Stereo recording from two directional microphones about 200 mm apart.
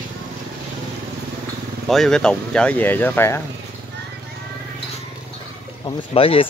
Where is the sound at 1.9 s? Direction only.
Centre (ahead or behind).